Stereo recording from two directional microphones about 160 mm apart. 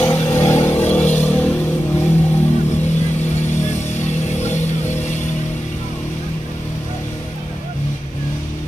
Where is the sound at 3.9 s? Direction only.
45° left (ahead or behind).